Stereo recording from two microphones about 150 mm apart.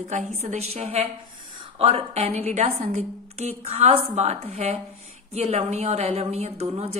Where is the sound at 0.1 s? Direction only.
50° right (ahead or behind).